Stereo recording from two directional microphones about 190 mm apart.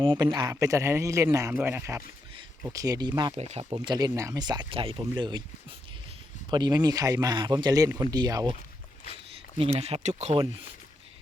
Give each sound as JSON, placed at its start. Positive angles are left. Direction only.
{"t": 0.0, "sound": "a man's voice", "side_deg": -25}
{"t": 3.3, "sound": "speech", "side_deg": -35}
{"t": 3.7, "sound": "speech", "side_deg": -20}
{"t": 6.5, "sound": "speech", "side_deg": -20}
{"t": 9.6, "sound": "speech", "side_deg": -30}